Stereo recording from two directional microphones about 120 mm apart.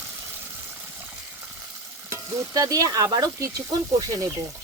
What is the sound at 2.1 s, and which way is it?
Sizzle, 30° right (ahead or behind).